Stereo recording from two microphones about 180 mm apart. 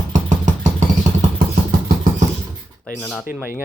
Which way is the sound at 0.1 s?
45° right (ahead or behind).